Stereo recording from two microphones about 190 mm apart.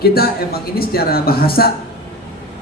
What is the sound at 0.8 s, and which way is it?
Speech, 55° left (ahead or behind).